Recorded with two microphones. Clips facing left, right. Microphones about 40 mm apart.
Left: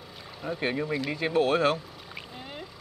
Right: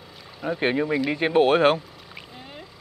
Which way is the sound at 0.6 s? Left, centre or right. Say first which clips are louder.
Right 6 dB; right.